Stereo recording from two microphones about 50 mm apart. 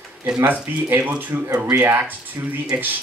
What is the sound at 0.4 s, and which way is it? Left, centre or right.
Speech, right.